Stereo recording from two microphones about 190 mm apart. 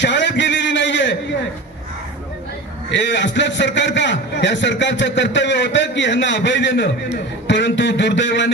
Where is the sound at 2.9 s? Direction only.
70° left (ahead or behind).